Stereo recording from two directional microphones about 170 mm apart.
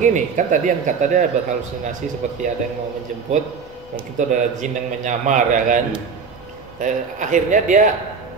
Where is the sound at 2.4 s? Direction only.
50° right (ahead or behind).